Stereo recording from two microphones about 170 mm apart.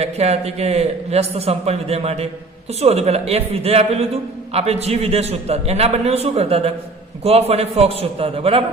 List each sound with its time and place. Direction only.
0.0 s a man's voice: 40° right (ahead or behind)